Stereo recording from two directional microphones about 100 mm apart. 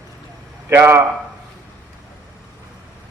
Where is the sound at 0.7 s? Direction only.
25° right (ahead or behind).